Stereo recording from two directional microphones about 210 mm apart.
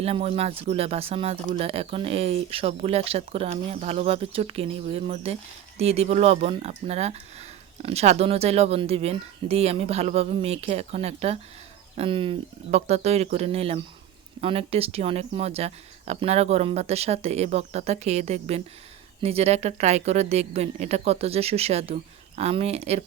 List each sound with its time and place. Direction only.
0.0 s speech: 30° right (ahead or behind)